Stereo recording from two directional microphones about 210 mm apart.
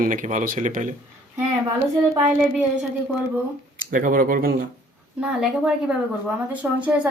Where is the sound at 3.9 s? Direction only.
40° right (ahead or behind).